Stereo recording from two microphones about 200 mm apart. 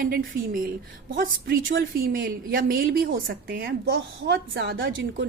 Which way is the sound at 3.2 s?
60° right (ahead or behind).